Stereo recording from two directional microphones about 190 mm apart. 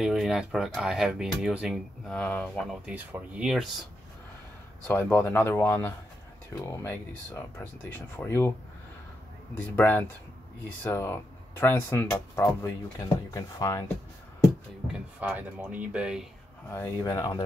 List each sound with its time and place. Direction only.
0.0 s speech: centre (ahead or behind)
2.9 s speech: 5° right (ahead or behind)
4.8 s speech: 10° left (ahead or behind)
9.8 s speech: 10° left (ahead or behind)
14.9 s speech: 5° right (ahead or behind)
16.7 s speech: 15° left (ahead or behind)